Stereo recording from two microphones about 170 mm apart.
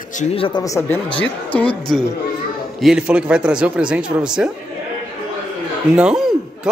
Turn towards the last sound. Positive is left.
turn(degrees=0)  # may be behind; listen again after turning